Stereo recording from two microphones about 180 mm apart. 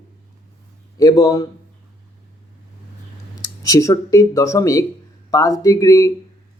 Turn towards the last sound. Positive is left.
turn(degrees=20)  # may be behind; listen again after turning